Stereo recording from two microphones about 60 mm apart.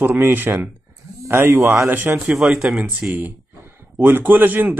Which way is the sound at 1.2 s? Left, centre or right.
Right.